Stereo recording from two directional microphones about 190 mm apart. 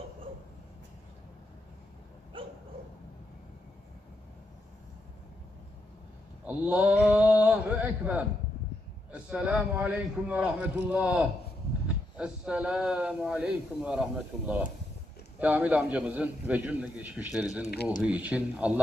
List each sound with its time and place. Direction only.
2.3 s dog: 30° right (ahead or behind)
6.4 s a man's voice: 5° right (ahead or behind)